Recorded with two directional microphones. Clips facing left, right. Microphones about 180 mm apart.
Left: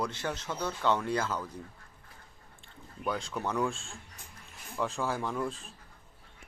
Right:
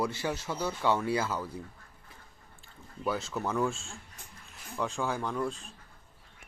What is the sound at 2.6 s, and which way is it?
Speech, 5° right (ahead or behind).